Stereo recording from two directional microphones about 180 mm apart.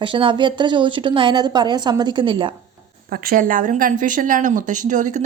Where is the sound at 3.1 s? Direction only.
55° right (ahead or behind).